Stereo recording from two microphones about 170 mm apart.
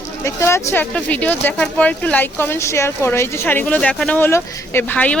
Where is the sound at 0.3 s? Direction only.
15° left (ahead or behind).